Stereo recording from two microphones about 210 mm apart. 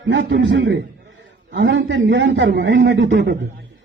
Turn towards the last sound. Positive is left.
turn(degrees=-60)  # may be behind; listen again after turning